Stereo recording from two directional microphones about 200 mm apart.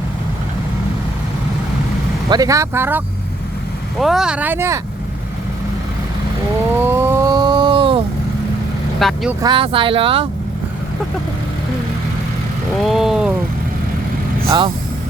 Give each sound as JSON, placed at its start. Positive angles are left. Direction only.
{"t": 2.3, "sound": "speech", "side_deg": -15}
{"t": 4.0, "sound": "speech", "side_deg": -5}
{"t": 6.7, "sound": "vehicle", "side_deg": -10}
{"t": 9.0, "sound": "speech", "side_deg": 0}
{"t": 9.4, "sound": "speech", "side_deg": -25}
{"t": 12.8, "sound": "speech", "side_deg": 0}